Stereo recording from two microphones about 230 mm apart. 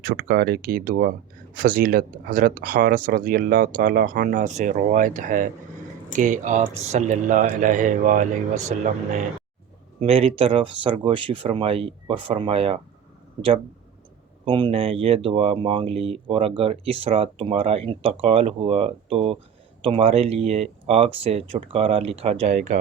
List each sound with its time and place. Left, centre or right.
0.0 s speech: right
10.0 s speech: right
14.4 s speech: right